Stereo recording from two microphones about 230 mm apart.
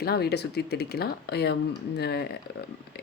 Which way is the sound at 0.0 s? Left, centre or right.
Left.